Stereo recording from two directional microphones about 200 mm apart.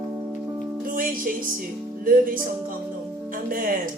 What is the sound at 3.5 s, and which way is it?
Speech, 45° right (ahead or behind).